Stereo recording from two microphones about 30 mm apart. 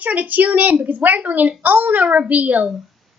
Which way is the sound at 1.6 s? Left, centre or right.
Right.